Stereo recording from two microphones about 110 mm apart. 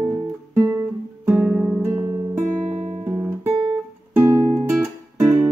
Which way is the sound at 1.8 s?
25° right (ahead or behind).